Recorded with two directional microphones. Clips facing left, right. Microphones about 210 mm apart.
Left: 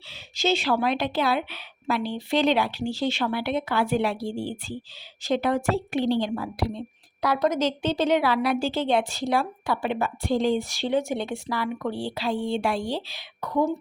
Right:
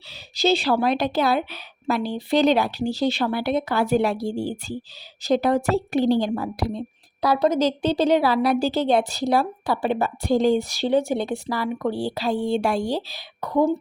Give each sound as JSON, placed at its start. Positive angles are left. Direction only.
{"t": 0.1, "sound": "a woman's voice", "side_deg": -35}